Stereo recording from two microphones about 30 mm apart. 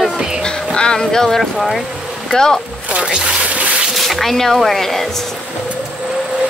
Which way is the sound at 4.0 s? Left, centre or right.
Centre.